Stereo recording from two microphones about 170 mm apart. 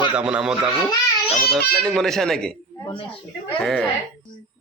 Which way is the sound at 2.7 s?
25° left (ahead or behind).